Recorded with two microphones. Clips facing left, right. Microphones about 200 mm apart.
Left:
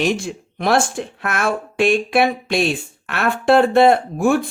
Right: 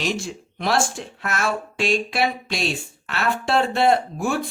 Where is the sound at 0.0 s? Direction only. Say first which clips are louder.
Left 6 dB; 55° left (ahead or behind).